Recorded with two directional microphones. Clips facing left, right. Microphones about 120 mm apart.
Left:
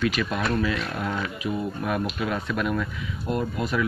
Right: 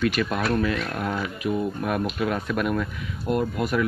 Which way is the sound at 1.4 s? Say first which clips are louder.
Right 3 dB; 45° right (ahead or behind).